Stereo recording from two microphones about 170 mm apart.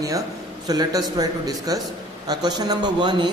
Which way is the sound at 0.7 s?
20° right (ahead or behind).